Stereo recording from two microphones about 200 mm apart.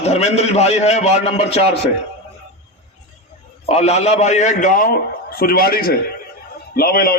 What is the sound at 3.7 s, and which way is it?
A man's voice, 35° left (ahead or behind).